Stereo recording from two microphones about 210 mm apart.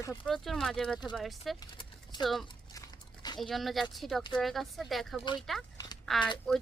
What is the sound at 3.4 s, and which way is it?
Speech, centre (ahead or behind).